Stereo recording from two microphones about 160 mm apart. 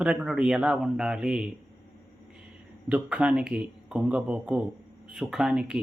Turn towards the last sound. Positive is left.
turn(degrees=-5)  # may be behind; listen again after turning